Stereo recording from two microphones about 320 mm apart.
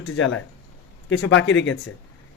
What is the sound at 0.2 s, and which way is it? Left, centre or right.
Speech, left.